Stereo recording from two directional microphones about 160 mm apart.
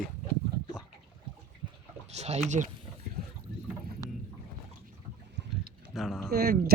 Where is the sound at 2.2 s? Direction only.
45° right (ahead or behind).